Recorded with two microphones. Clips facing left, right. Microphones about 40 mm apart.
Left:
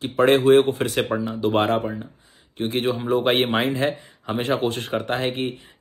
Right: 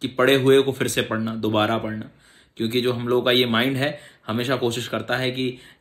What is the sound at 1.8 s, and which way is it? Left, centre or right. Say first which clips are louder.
Speech: left 1 dB; centre.